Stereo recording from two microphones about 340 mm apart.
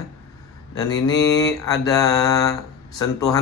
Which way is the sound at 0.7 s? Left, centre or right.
Centre.